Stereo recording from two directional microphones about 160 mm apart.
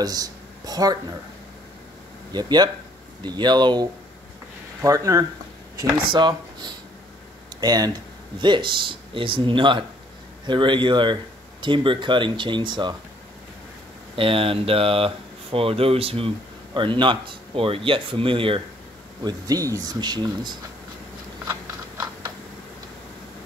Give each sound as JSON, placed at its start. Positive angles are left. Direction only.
{"t": 0.0, "sound": "speech", "side_deg": -25}
{"t": 2.3, "sound": "speech", "side_deg": -25}
{"t": 14.1, "sound": "speech", "side_deg": -35}
{"t": 19.2, "sound": "speech", "side_deg": -25}